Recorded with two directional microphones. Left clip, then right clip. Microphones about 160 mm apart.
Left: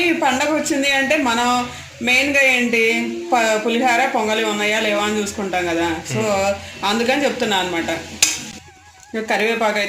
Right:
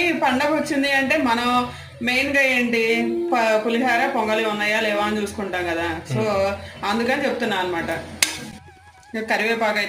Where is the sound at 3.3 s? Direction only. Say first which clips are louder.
Left 3 dB; 55° left (ahead or behind).